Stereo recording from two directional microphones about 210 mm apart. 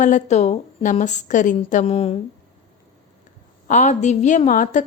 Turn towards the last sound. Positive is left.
turn(degrees=40)  # may be behind; listen again after turning